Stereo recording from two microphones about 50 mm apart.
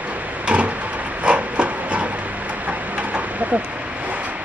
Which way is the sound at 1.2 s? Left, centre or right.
Right.